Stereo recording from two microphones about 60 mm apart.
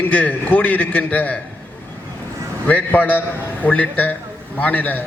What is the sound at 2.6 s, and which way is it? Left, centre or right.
A man's voice, left.